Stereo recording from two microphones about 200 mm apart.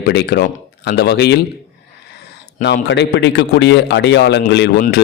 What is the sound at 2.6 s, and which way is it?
A man's voice, 60° left (ahead or behind).